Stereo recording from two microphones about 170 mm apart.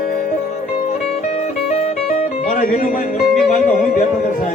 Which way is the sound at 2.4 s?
50° left (ahead or behind).